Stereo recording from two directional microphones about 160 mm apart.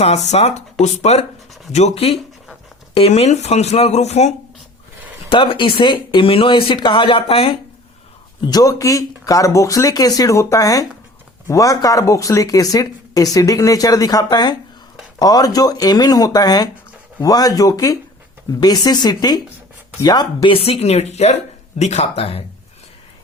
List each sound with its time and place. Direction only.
0.0 s speech: 45° left (ahead or behind)
5.3 s speech: 35° left (ahead or behind)
8.4 s speech: 25° left (ahead or behind)